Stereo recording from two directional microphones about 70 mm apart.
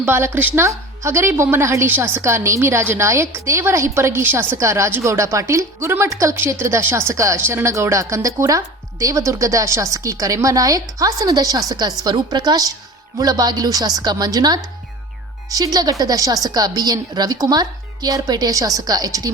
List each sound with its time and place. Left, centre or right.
0.0 s a woman's voice: right
4.5 s a woman's voice: right
12.0 s a woman's voice: right
14.3 s a woman's voice: right